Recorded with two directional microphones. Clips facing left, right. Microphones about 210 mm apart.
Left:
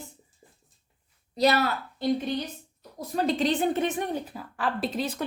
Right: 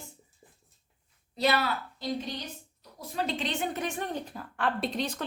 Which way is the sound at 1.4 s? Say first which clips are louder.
Left 4 dB; 40° left (ahead or behind).